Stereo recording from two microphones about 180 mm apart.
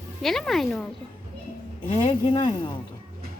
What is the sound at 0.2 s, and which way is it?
Speech, centre (ahead or behind).